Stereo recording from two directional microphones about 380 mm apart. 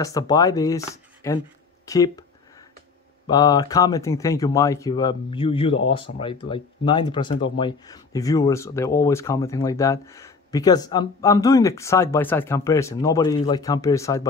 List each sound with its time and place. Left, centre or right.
0.0 s speech: centre
3.3 s speech: centre